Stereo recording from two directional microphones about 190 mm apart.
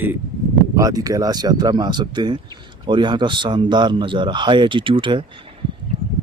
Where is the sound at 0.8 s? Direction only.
20° right (ahead or behind).